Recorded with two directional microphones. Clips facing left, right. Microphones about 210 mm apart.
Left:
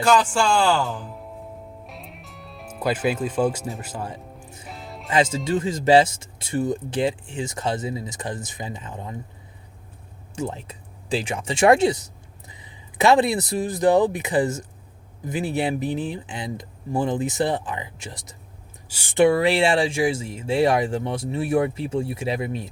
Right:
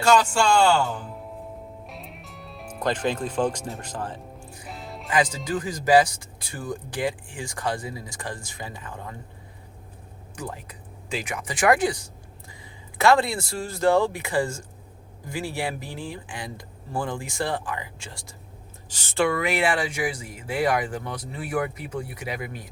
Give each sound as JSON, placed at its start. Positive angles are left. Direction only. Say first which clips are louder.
{"t": 0.3, "sound": "speech", "louder": "even", "side_deg": 5}
{"t": 1.9, "sound": "music", "louder": "even", "side_deg": 0}
{"t": 5.0, "sound": "speech", "louder": "left 3 dB", "side_deg": 25}
{"t": 10.3, "sound": "speech", "louder": "left 6 dB", "side_deg": 25}
{"t": 19.3, "sound": "speech", "louder": "left 5 dB", "side_deg": 30}